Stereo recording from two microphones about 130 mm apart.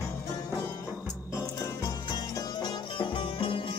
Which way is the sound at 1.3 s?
25° left (ahead or behind).